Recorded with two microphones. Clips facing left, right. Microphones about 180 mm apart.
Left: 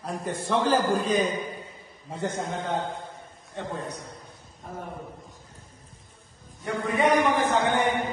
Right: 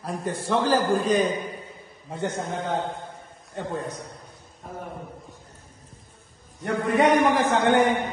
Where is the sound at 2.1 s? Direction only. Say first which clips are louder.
Right 1 dB; centre (ahead or behind).